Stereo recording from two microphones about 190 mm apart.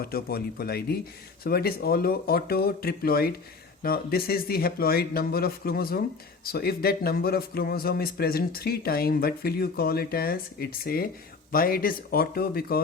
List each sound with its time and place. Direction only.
0.0 s speech: 55° left (ahead or behind)